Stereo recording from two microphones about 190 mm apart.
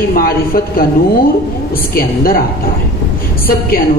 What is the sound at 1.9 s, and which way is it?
Speech, 50° left (ahead or behind).